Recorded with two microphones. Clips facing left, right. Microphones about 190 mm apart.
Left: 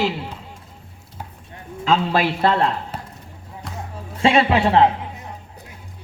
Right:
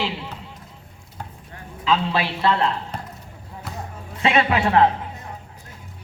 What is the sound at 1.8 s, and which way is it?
Speech, 45° left (ahead or behind).